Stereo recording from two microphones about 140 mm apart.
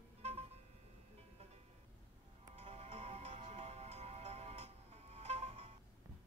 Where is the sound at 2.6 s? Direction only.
45° right (ahead or behind).